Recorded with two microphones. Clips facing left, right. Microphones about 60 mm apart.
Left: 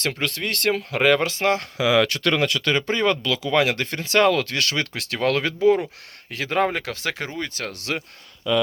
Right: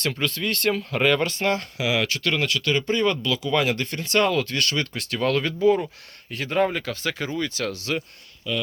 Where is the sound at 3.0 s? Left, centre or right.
Left.